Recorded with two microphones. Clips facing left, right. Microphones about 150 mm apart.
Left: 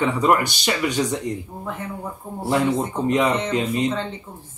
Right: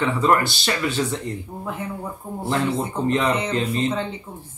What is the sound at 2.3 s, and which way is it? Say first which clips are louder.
Speech: left 3 dB; 15° left (ahead or behind).